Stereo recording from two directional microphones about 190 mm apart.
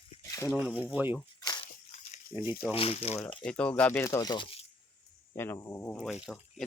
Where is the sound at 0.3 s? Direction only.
15° left (ahead or behind).